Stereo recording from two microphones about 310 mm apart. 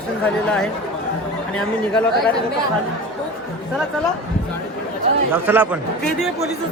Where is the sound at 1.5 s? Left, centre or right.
Centre.